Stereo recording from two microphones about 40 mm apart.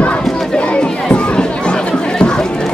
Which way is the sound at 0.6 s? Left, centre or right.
Left.